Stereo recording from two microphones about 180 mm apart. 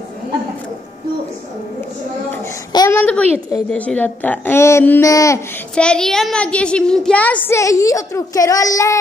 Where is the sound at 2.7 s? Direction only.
20° left (ahead or behind).